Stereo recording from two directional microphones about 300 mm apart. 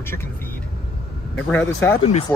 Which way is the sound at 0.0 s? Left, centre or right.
Centre.